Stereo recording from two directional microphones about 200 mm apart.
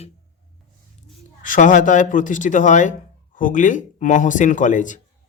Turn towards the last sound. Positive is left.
turn(degrees=40)  # may be behind; listen again after turning